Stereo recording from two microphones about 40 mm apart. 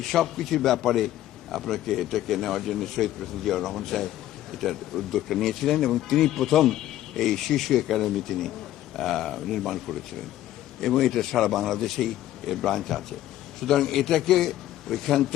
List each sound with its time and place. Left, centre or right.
0.1 s a man's voice: centre